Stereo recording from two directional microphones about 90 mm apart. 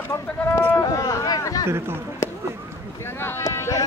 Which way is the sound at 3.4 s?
35° left (ahead or behind).